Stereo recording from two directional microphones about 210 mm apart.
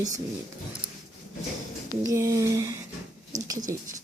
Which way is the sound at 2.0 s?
15° right (ahead or behind).